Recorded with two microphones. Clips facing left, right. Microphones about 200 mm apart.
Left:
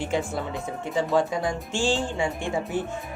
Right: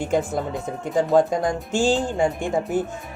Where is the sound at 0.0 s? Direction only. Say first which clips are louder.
Right 4 dB; 45° right (ahead or behind).